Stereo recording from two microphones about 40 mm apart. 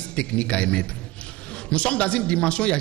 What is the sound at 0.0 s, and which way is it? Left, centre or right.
A man's voice, left.